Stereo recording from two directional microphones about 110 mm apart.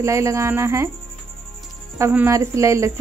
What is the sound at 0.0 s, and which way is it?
Speech, 25° right (ahead or behind).